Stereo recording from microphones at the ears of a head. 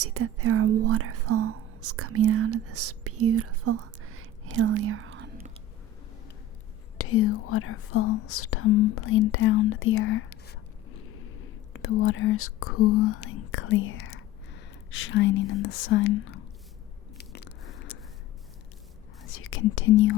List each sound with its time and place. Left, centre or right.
0.0 s speech: right
7.0 s speech: left
17.2 s biting: left
19.2 s speech: left